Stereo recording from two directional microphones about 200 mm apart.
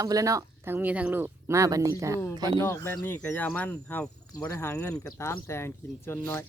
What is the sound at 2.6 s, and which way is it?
Speech, 10° left (ahead or behind).